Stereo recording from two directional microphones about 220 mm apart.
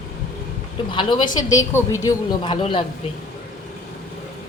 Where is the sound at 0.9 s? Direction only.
20° left (ahead or behind).